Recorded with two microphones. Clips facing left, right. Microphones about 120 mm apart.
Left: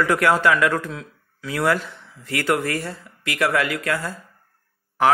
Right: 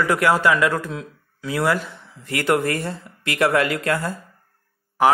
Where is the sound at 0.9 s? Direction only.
25° right (ahead or behind).